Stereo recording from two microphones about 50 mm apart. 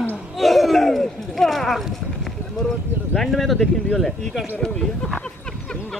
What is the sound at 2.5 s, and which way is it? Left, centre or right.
Speech, centre.